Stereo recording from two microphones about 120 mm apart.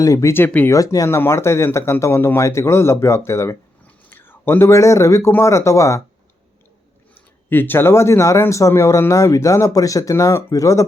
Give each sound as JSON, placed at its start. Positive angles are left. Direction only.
{"t": 0.0, "sound": "speech", "side_deg": 25}
{"t": 0.8, "sound": "speech", "side_deg": 25}
{"t": 3.8, "sound": "a sound", "side_deg": 15}
{"t": 5.3, "sound": "speech", "side_deg": 25}
{"t": 7.1, "sound": "speech", "side_deg": 15}